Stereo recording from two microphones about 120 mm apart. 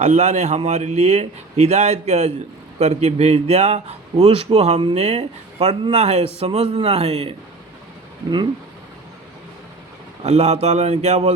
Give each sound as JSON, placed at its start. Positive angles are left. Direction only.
{"t": 0.0, "sound": "a man's voice", "side_deg": -75}
{"t": 10.2, "sound": "a man's voice", "side_deg": -70}